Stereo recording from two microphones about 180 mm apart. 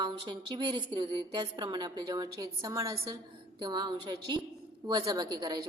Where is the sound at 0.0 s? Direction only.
25° right (ahead or behind).